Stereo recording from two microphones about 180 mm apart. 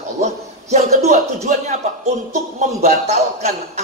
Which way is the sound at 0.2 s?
40° right (ahead or behind).